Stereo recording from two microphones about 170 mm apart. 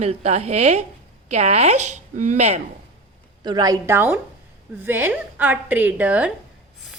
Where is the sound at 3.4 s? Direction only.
25° right (ahead or behind).